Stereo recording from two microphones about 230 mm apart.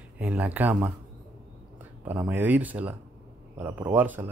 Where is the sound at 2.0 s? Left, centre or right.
Centre.